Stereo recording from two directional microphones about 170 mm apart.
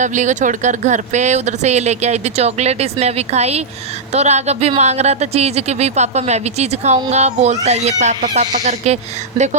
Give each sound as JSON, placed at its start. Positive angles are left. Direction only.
{"t": 0.0, "sound": "speech", "side_deg": -45}